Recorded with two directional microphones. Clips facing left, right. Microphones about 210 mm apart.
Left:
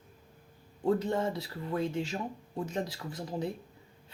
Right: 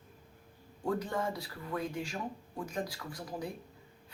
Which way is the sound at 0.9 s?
25° left (ahead or behind).